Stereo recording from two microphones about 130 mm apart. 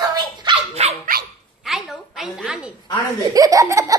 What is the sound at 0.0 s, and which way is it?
Dog, 30° right (ahead or behind).